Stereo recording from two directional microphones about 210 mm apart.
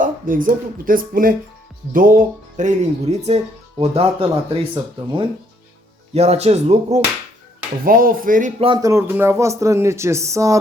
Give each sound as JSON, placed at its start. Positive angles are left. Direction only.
{"t": 0.0, "sound": "speech", "side_deg": -40}
{"t": 7.9, "sound": "speech", "side_deg": -45}
{"t": 8.6, "sound": "speech", "side_deg": -20}